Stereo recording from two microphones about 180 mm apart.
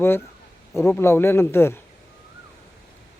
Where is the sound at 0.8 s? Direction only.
15° left (ahead or behind).